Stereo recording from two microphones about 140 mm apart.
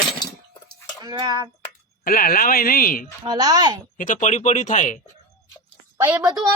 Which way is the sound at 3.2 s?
30° right (ahead or behind).